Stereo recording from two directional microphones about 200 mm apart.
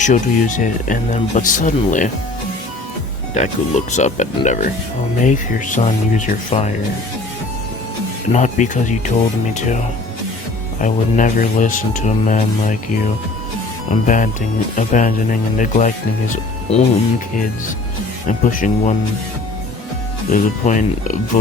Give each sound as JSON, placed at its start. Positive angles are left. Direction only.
{"t": 0.0, "sound": "speech", "side_deg": 40}
{"t": 3.3, "sound": "speech", "side_deg": 35}
{"t": 8.3, "sound": "speech", "side_deg": 35}
{"t": 10.8, "sound": "speech", "side_deg": 40}
{"t": 13.9, "sound": "speech", "side_deg": 40}
{"t": 18.3, "sound": "speech", "side_deg": 40}
{"t": 20.3, "sound": "speech", "side_deg": 40}